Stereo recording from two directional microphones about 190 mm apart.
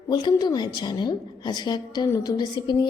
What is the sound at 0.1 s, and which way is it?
A woman's voice, 25° left (ahead or behind).